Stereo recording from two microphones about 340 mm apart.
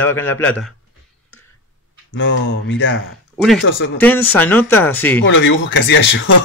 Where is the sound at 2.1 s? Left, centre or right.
Left.